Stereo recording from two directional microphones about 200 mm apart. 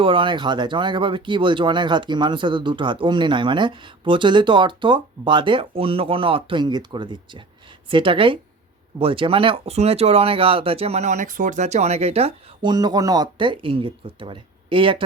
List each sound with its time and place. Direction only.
0.0 s speech: 25° right (ahead or behind)
12.7 s speech: 20° right (ahead or behind)